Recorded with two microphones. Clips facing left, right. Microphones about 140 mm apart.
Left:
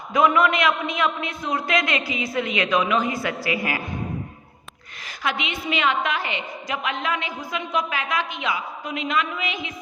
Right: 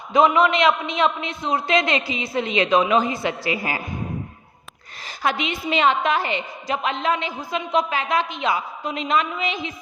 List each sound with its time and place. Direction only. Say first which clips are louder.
0.1 s a man's voice: right 2 dB; 25° right (ahead or behind)
5.0 s a woman's voice: right 3 dB; 35° right (ahead or behind)